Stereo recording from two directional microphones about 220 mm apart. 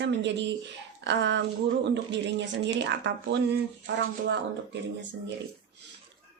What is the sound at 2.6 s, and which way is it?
A woman's voice, 55° right (ahead or behind).